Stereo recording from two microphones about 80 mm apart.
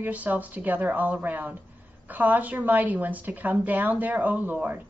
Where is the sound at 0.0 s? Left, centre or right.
Centre.